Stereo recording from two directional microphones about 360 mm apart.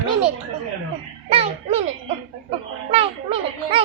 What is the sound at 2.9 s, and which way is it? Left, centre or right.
Speech, centre.